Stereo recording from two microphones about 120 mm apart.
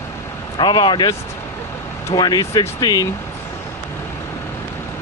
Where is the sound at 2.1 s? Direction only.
35° left (ahead or behind).